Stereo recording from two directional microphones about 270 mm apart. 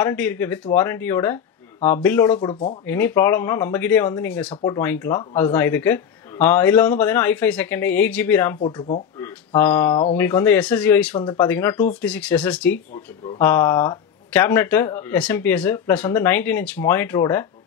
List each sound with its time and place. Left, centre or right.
0.0 s speech: centre
8.5 s speech: left
9.2 s speech: centre
11.1 s speech: centre
11.4 s speech: centre